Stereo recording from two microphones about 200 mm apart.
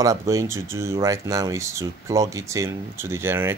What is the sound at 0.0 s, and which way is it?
Speech, 15° right (ahead or behind).